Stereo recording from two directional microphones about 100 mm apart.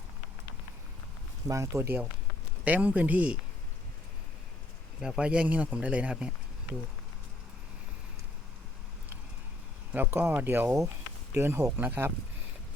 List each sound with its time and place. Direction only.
1.5 s speech: 30° right (ahead or behind)
2.6 s speech: 15° right (ahead or behind)
4.9 s speech: 5° right (ahead or behind)
9.9 s speech: 20° right (ahead or behind)